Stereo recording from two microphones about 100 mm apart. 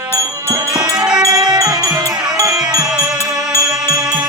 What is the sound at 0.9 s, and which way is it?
Music, 5° right (ahead or behind).